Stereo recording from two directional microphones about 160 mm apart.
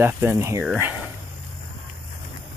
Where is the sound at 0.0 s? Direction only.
15° right (ahead or behind).